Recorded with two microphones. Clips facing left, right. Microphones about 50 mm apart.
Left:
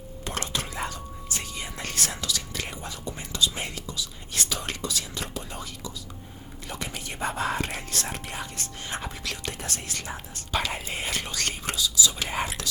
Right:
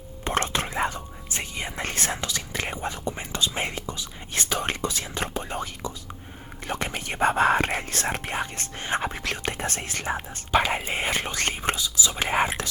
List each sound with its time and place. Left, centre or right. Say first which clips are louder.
0.3 s speech: right 6 dB; right